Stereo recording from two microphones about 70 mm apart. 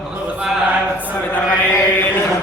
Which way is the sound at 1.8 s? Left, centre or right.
Left.